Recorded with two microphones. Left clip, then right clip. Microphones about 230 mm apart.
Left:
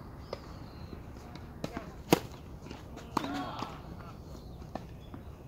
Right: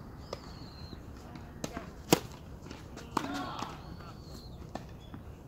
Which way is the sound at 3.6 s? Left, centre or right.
Right.